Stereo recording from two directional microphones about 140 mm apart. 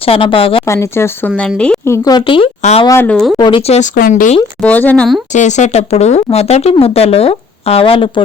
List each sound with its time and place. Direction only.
0.0 s speech: 40° left (ahead or behind)
0.7 s speech: 20° left (ahead or behind)
1.4 s speech: 5° left (ahead or behind)
1.8 s speech: 20° left (ahead or behind)
2.1 s speech: 40° left (ahead or behind)
2.6 s speech: 55° left (ahead or behind)
2.8 s speech: 20° left (ahead or behind)
3.3 s speech: 30° left (ahead or behind)
3.9 s speech: 80° left
4.6 s speech: 10° left (ahead or behind)
5.3 s speech: 60° left (ahead or behind); by 8.2 s 35° left (ahead or behind)